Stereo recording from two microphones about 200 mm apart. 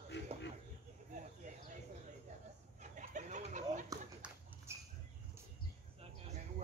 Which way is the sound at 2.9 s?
40° right (ahead or behind).